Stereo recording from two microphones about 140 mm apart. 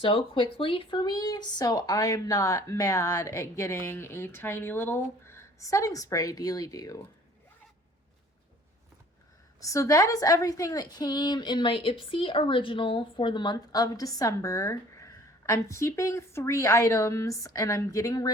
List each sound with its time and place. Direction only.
0.0 s a woman's voice: 35° left (ahead or behind)
9.6 s a woman's voice: 25° left (ahead or behind)